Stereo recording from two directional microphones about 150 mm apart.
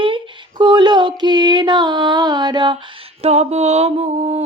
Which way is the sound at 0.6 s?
30° right (ahead or behind).